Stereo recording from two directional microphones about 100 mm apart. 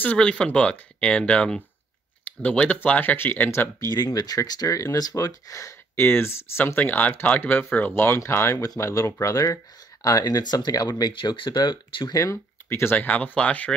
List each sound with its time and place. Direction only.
0.0 s speech: 15° left (ahead or behind); by 12.2 s 45° left (ahead or behind)
12.2 s speech: 30° left (ahead or behind); by 13.7 s 10° left (ahead or behind)